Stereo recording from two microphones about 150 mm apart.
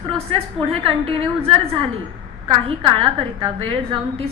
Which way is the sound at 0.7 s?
40° right (ahead or behind).